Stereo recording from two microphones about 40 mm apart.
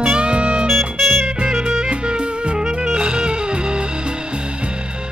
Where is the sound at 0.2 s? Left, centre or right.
Right.